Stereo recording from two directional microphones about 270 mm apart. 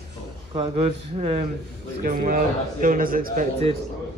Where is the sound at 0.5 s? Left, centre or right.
Right.